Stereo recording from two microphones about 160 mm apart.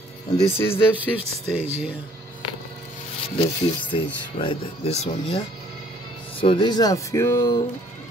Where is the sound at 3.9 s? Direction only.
30° left (ahead or behind).